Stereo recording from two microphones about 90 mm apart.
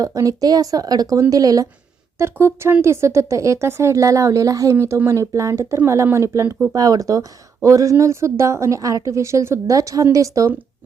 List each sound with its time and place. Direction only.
0.0 s speech: 40° right (ahead or behind)
2.1 s speech: 30° right (ahead or behind)